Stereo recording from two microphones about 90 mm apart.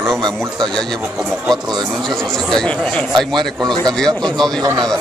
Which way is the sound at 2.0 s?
5° left (ahead or behind).